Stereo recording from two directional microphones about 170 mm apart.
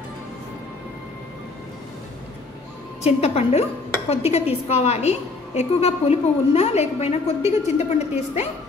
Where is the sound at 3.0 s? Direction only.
40° left (ahead or behind).